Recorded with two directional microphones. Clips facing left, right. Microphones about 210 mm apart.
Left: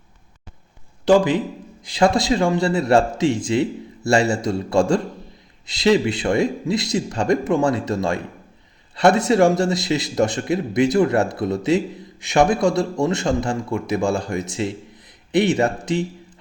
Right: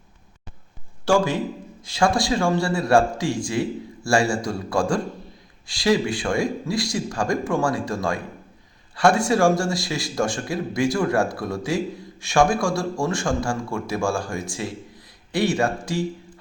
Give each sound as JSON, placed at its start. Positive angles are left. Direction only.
{"t": 1.0, "sound": "a man's voice", "side_deg": 20}